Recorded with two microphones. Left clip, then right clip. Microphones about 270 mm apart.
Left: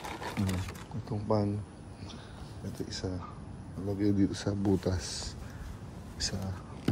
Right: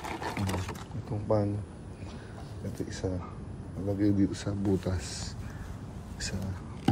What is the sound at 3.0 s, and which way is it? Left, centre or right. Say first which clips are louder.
Speech: right 4 dB; centre.